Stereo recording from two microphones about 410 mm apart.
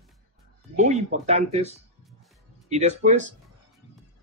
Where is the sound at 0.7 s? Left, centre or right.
Centre.